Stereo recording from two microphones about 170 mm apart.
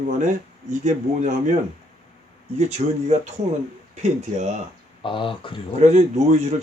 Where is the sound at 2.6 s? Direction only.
40° right (ahead or behind).